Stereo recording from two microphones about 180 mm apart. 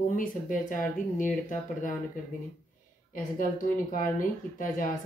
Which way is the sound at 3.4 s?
45° left (ahead or behind).